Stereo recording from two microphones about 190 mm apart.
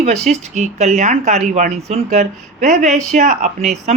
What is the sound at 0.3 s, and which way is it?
Speech, 35° right (ahead or behind).